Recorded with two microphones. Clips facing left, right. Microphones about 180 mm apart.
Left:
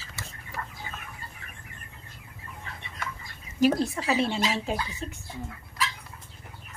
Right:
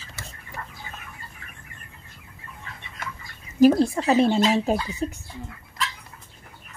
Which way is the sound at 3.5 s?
40° right (ahead or behind).